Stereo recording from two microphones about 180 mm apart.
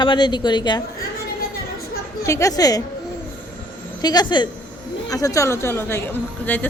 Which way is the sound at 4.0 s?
25° left (ahead or behind).